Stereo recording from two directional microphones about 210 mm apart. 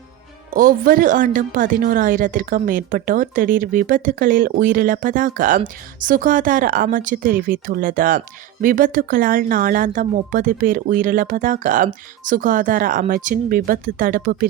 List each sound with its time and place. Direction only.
0.5 s a woman's voice: 40° right (ahead or behind)